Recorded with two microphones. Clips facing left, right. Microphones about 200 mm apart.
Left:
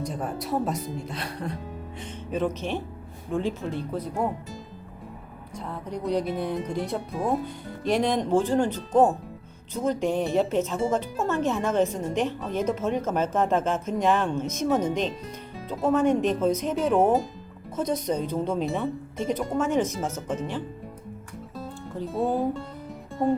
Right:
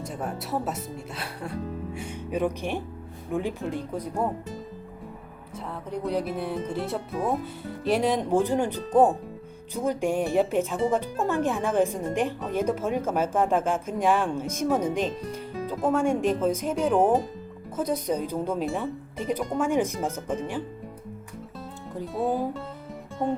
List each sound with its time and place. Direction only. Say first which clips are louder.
0.0 s speech: left 2 dB; 5° right (ahead or behind)
5.5 s speech: even; 5° right (ahead or behind)
22.2 s speech: left 1 dB; centre (ahead or behind)